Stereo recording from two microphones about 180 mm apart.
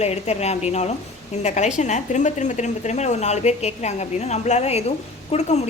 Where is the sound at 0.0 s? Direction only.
35° left (ahead or behind).